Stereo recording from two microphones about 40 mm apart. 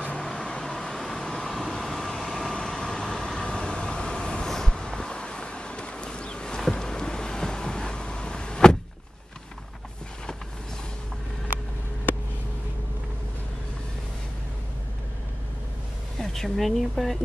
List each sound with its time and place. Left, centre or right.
0.0 s vehicle: left; by 3.4 s centre
3.4 s vehicle: left
6.7 s a sound: centre
16.2 s speech: centre